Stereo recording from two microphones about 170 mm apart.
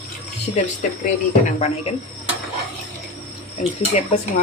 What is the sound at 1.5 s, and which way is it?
Speech, 40° left (ahead or behind).